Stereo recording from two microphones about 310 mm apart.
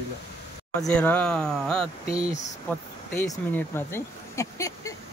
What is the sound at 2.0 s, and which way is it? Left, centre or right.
Speech, centre.